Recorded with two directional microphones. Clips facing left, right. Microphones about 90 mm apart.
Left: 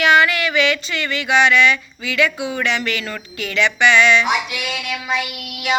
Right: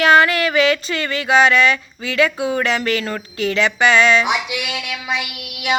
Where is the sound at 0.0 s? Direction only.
40° right (ahead or behind).